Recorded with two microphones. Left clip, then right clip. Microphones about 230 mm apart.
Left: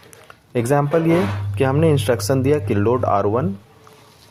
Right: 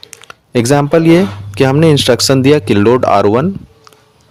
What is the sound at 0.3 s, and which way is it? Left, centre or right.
Speech, right.